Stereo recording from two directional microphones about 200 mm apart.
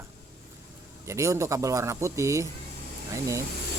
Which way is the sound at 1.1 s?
15° right (ahead or behind).